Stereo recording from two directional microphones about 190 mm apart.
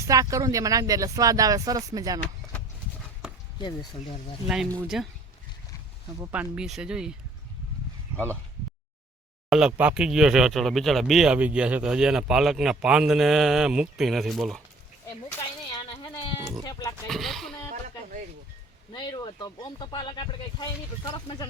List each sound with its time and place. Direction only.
0.1 s speech: 20° right (ahead or behind)
3.6 s speech: 20° left (ahead or behind)
4.4 s speech: 5° right (ahead or behind)
6.1 s speech: 10° right (ahead or behind)
8.1 s speech: 10° right (ahead or behind)
9.5 s speech: 5° right (ahead or behind)
15.9 s goat: 25° left (ahead or behind)
17.1 s speech: centre (ahead or behind)
18.9 s speech: 25° left (ahead or behind)